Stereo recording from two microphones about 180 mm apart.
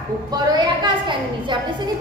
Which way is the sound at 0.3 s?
25° right (ahead or behind).